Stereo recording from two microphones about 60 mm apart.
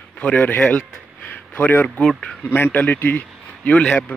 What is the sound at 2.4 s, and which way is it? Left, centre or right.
A man's voice, left.